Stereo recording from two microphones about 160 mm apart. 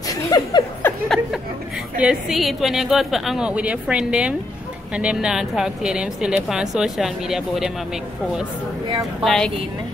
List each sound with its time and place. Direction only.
0.1 s laughter: 25° left (ahead or behind)
1.0 s a sound: centre (ahead or behind)
2.0 s a woman's voice: 5° right (ahead or behind)
9.2 s a woman's voice: 5° left (ahead or behind)